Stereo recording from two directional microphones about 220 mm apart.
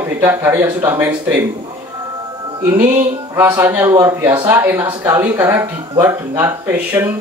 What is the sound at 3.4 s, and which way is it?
Speech, 10° right (ahead or behind).